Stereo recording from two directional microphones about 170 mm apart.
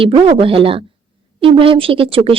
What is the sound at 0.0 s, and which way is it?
Speech, 30° right (ahead or behind).